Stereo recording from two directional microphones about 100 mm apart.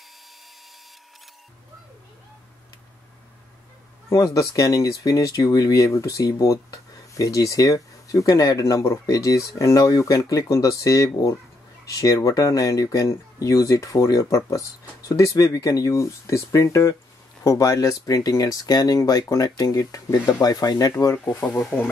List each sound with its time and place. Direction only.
4.1 s speech: 35° left (ahead or behind)
21.1 s speech: 15° left (ahead or behind)